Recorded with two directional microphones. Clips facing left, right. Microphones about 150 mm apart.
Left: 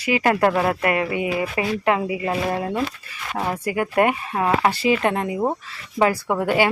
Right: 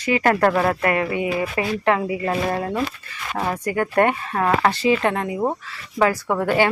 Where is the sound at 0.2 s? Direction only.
15° left (ahead or behind).